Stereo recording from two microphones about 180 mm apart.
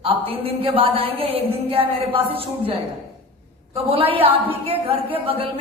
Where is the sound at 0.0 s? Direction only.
30° right (ahead or behind).